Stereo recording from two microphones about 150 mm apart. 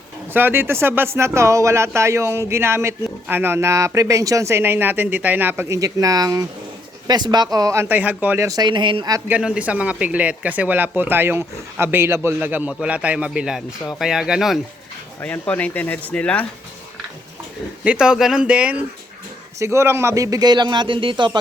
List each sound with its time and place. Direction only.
0.3 s a man's voice: 15° right (ahead or behind)
8.4 s speech: 25° right (ahead or behind)
9.3 s speech: 10° right (ahead or behind)
15.2 s speech: 10° left (ahead or behind)
17.8 s speech: 5° right (ahead or behind)
19.5 s a man's voice: 20° right (ahead or behind)